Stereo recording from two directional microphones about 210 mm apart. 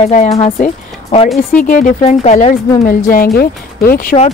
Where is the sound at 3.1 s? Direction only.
45° left (ahead or behind).